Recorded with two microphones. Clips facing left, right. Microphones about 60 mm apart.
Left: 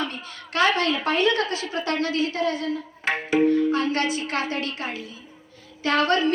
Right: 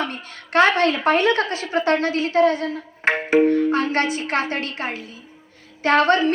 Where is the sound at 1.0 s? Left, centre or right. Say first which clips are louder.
Right 4 dB; right.